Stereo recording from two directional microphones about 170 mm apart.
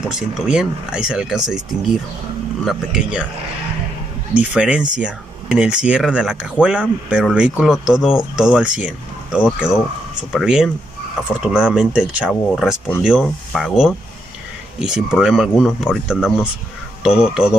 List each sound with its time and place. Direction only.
0.3 s speech: 5° right (ahead or behind)
2.6 s speech: centre (ahead or behind)
4.4 s speech: 5° right (ahead or behind)